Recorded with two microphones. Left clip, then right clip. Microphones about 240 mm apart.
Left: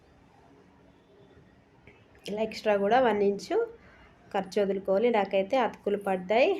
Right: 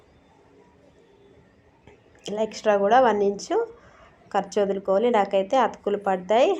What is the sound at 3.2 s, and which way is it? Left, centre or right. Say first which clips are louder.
Speech: right 3 dB; left.